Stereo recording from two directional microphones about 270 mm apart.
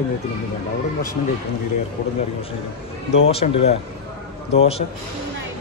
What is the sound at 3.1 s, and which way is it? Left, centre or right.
Speech, left.